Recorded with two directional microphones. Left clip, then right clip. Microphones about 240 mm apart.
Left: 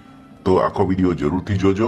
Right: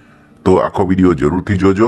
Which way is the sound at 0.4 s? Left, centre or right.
Right.